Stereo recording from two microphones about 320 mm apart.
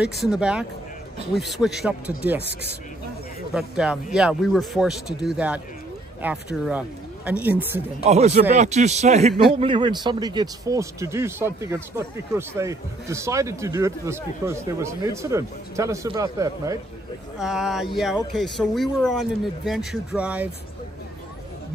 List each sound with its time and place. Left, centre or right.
0.2 s speech: centre
3.5 s speech: centre
8.0 s a man's voice: centre